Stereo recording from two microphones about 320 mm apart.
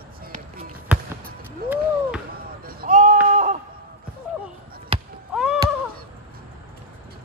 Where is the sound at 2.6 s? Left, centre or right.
Right.